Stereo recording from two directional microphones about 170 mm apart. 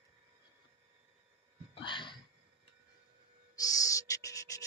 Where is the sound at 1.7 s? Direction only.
30° left (ahead or behind).